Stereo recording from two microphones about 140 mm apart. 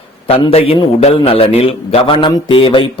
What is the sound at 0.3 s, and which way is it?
A man's voice, 40° left (ahead or behind).